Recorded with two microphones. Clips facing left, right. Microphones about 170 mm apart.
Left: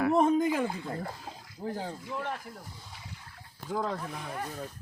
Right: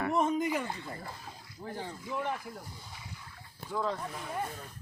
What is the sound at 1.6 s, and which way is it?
Speech, 35° left (ahead or behind).